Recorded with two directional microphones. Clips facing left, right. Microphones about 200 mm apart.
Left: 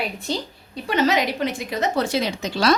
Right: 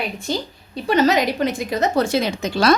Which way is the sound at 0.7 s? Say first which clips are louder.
Right 4 dB; 40° right (ahead or behind).